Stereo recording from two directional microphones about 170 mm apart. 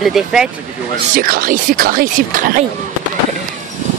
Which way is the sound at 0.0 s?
Centre (ahead or behind).